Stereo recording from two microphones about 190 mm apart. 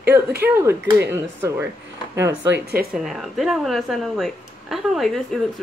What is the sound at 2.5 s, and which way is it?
Speech, 55° right (ahead or behind).